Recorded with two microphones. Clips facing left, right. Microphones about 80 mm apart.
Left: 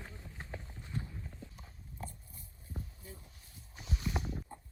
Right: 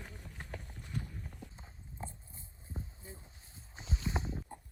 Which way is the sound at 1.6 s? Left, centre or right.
Right.